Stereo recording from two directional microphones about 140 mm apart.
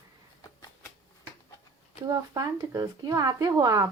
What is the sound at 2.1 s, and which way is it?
A woman's voice, 25° right (ahead or behind).